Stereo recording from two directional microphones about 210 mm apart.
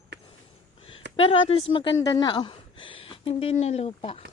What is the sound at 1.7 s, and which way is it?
Speech, 25° left (ahead or behind).